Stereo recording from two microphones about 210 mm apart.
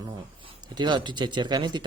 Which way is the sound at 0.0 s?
20° right (ahead or behind).